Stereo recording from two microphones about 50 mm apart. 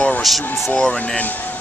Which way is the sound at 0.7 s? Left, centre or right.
Left.